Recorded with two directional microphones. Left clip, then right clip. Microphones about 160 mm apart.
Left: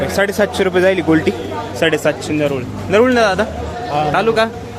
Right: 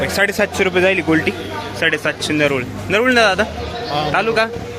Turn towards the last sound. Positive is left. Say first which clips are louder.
# left 2 dB
turn(degrees=10)  # may be behind; listen again after turning